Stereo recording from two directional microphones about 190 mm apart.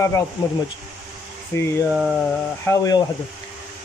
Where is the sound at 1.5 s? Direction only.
15° left (ahead or behind).